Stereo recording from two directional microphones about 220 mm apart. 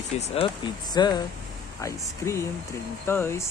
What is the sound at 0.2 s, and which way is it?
Speech, 25° left (ahead or behind).